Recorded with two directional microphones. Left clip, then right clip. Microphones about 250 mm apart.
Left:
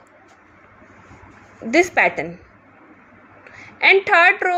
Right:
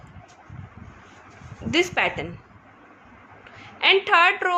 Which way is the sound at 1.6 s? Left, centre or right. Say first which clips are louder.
Left 6 dB; centre.